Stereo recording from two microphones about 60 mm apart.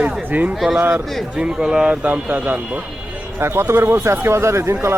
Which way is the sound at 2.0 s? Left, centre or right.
Right.